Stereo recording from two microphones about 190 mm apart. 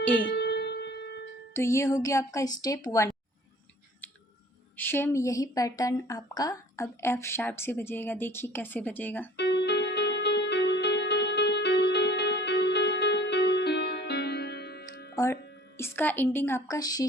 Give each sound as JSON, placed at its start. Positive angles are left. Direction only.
{"t": 0.3, "sound": "music", "side_deg": 60}
{"t": 1.5, "sound": "speech", "side_deg": 15}
{"t": 4.8, "sound": "speech", "side_deg": 10}
{"t": 9.4, "sound": "music", "side_deg": 60}
{"t": 15.1, "sound": "music", "side_deg": 15}
{"t": 15.8, "sound": "speech", "side_deg": 10}